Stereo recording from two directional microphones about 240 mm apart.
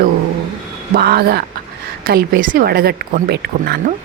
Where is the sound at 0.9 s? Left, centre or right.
Right.